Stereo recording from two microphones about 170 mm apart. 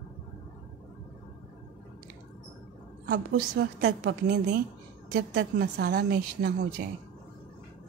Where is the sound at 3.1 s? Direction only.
80° right.